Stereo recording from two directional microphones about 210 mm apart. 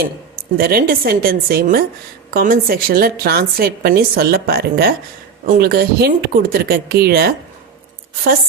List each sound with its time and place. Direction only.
0.5 s a woman's voice: 45° right (ahead or behind)